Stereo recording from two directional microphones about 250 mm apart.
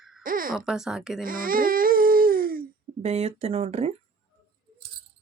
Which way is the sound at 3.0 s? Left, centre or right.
Right.